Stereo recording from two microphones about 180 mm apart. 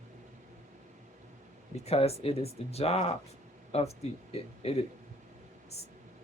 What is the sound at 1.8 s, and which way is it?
Speech, 35° left (ahead or behind).